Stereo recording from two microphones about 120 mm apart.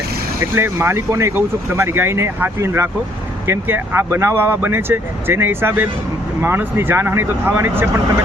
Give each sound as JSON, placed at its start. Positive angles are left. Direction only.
{"t": 0.5, "sound": "speech", "side_deg": -20}